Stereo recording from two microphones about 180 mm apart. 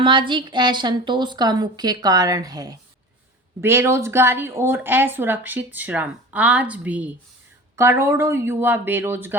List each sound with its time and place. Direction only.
0.0 s a woman's voice: 25° right (ahead or behind)